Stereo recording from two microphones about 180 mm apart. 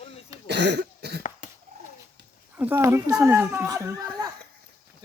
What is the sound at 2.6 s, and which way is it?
A woman's voice, 15° right (ahead or behind).